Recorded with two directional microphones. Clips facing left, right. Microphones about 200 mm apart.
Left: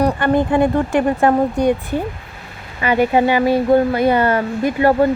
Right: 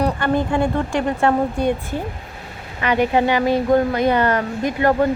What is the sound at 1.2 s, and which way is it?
Speech, 15° left (ahead or behind).